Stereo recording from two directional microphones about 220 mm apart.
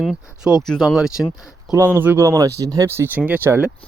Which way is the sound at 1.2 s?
15° left (ahead or behind).